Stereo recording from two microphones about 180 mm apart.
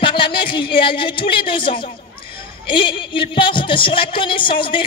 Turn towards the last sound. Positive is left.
turn(degrees=30)  # may be behind; listen again after turning